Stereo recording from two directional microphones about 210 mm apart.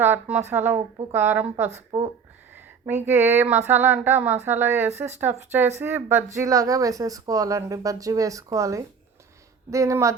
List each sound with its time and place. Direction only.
0.0 s speech: 10° right (ahead or behind)